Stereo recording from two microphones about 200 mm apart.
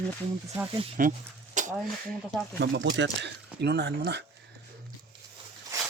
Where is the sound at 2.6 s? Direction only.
60° right (ahead or behind).